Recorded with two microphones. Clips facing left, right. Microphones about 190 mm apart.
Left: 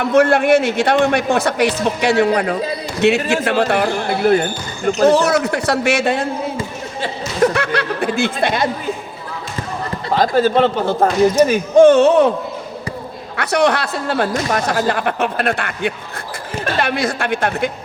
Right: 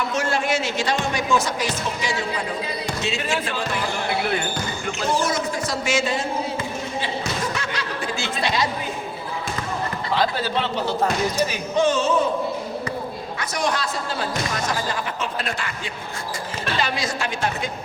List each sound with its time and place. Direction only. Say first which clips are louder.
0.0 s speech: left 11 dB; 60° left (ahead or behind)
4.1 s speech: left 11 dB; 45° left (ahead or behind)
5.0 s speech: left 10 dB; 70° left (ahead or behind)
7.0 s chuckle: left 13 dB; 65° left (ahead or behind)
10.1 s speech: left 9 dB; 45° left (ahead or behind); by 12.3 s 65° left (ahead or behind)
13.3 s speech: left 10 dB; 65° left (ahead or behind)